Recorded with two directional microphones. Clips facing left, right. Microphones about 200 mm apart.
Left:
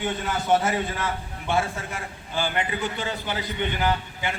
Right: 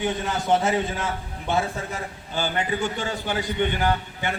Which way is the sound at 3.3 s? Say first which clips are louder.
Right 7 dB; 50° right (ahead or behind).